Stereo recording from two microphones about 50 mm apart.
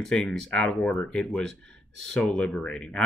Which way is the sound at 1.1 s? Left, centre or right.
Centre.